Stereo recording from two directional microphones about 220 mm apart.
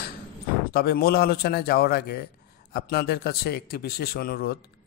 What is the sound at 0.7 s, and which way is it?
A man's voice, 45° left (ahead or behind).